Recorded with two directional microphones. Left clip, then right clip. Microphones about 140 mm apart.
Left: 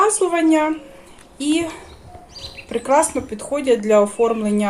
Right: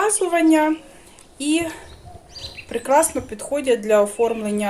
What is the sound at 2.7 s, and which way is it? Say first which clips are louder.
Speech: left 1 dB; 20° right (ahead or behind).